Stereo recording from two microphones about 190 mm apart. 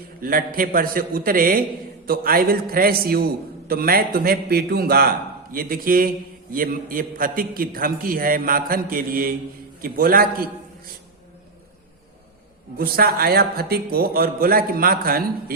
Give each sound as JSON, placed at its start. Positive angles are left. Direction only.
{"t": 0.2, "sound": "a man's voice", "side_deg": -50}
{"t": 12.7, "sound": "a man's voice", "side_deg": -50}